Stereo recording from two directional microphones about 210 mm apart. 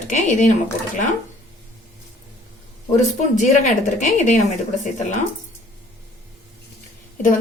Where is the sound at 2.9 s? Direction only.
35° left (ahead or behind).